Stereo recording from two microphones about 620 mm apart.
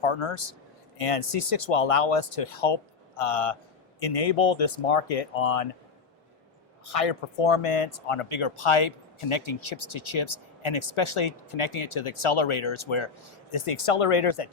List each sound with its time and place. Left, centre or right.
0.0 s speech: left
6.8 s speech: left